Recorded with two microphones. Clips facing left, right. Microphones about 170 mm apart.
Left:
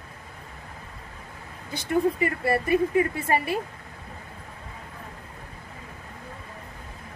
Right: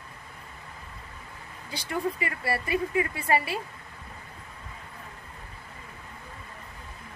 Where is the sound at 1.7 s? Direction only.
50° left (ahead or behind).